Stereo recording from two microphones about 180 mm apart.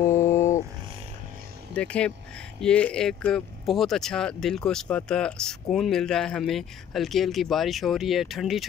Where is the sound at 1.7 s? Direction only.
5° left (ahead or behind).